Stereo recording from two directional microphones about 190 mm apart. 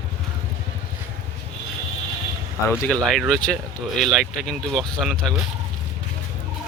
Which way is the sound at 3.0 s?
Centre (ahead or behind).